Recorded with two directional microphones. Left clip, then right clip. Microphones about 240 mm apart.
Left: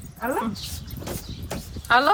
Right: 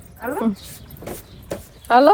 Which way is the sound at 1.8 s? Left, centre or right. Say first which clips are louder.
Right 5 dB; centre.